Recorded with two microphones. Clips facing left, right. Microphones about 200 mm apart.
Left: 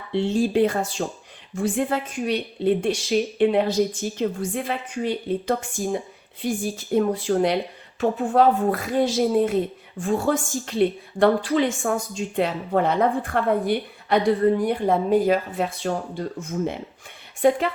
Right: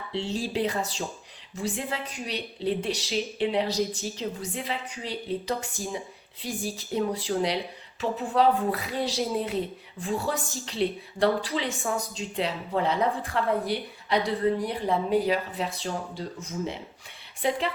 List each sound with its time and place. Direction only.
0.1 s a woman's voice: 50° left (ahead or behind)